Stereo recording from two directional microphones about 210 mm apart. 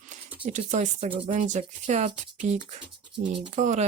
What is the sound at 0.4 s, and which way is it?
Speech, 35° right (ahead or behind).